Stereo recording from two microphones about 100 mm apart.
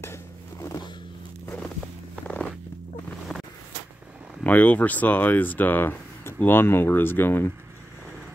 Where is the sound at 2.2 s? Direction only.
10° left (ahead or behind).